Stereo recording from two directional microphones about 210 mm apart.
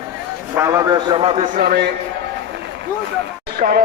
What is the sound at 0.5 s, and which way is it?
Speech, 15° right (ahead or behind).